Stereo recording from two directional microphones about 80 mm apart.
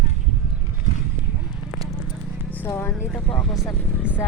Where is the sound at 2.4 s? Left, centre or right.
Right.